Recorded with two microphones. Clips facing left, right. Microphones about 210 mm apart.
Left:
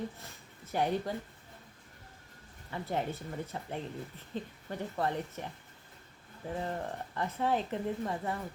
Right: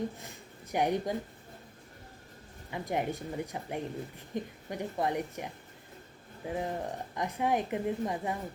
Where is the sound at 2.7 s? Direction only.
15° right (ahead or behind).